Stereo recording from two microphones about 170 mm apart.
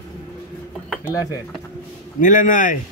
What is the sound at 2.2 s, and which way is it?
Speech, 50° left (ahead or behind).